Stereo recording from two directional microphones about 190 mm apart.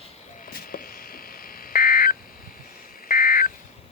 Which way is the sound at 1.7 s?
50° left (ahead or behind).